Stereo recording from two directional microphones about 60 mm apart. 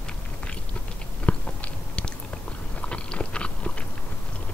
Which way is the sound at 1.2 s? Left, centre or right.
Left.